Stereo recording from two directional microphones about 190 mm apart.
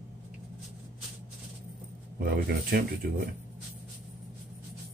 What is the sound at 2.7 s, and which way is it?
Speech, 55° right (ahead or behind).